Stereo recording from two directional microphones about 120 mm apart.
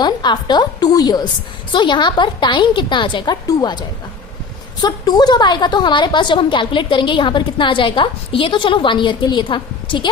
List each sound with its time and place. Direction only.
0.0 s a woman's voice: 40° left (ahead or behind)